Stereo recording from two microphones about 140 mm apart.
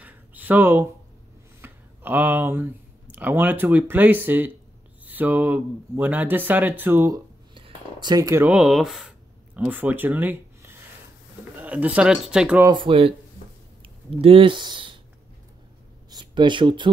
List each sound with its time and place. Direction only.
0.0 s a sound: 10° right (ahead or behind)
1.6 s speech: 15° right (ahead or behind)
7.5 s speech: 35° right (ahead or behind)
8.5 s speech: 5° right (ahead or behind)
9.6 s speech: 10° right (ahead or behind)
12.7 s speech: 40° right (ahead or behind)
16.1 s speech: 30° right (ahead or behind)